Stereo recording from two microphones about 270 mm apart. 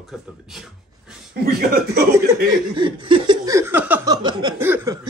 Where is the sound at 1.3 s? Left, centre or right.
Right.